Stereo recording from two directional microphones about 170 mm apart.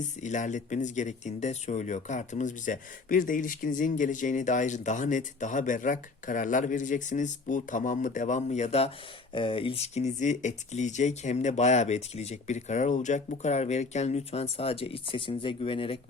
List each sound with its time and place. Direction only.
0.0 s speech: 45° left (ahead or behind)